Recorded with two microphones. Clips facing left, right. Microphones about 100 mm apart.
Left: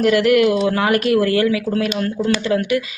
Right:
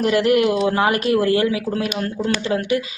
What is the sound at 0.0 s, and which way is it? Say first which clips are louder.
Speech: left 2 dB; 25° right (ahead or behind).